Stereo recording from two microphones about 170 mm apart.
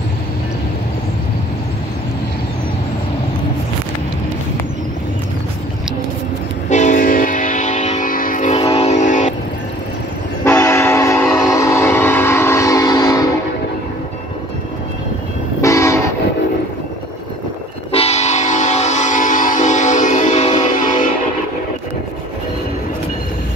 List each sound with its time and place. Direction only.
6.7 s music: 45° left (ahead or behind)
8.7 s vehicle: 40° left (ahead or behind)
10.4 s train: 15° left (ahead or behind)
15.6 s train: 15° left (ahead or behind)
17.9 s train: 40° left (ahead or behind)